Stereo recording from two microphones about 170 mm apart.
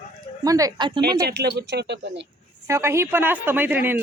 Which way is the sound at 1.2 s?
70° right (ahead or behind).